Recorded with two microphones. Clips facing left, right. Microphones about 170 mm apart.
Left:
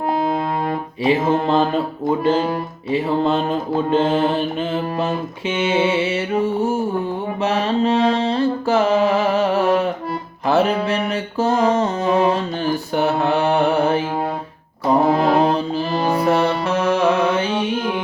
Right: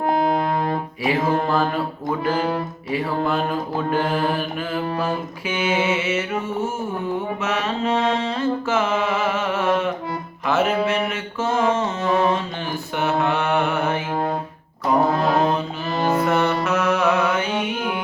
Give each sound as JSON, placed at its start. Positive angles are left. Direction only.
{"t": 1.0, "sound": "mantra", "side_deg": 25}
{"t": 14.9, "sound": "music", "side_deg": 30}
{"t": 16.2, "sound": "music", "side_deg": 30}